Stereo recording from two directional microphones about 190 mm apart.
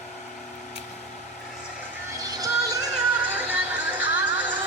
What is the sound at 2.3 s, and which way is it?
Music, 20° right (ahead or behind).